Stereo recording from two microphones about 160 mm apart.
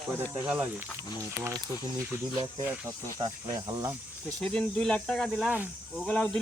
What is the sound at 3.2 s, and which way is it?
Speech, 20° right (ahead or behind).